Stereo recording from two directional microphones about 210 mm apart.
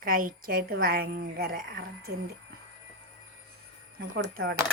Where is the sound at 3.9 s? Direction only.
45° right (ahead or behind).